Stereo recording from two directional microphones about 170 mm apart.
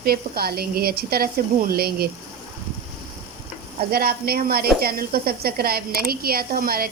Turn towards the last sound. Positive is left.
turn(degrees=-60)  # may be behind; listen again after turning